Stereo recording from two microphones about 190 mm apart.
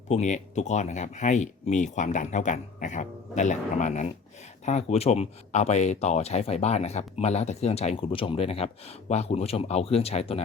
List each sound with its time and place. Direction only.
0.1 s speech: 35° left (ahead or behind)